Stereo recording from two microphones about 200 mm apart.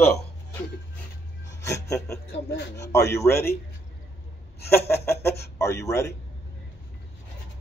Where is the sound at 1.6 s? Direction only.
15° left (ahead or behind).